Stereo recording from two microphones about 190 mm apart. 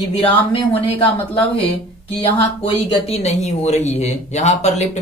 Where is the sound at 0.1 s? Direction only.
30° left (ahead or behind).